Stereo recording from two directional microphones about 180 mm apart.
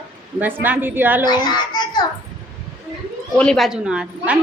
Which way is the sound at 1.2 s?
25° left (ahead or behind).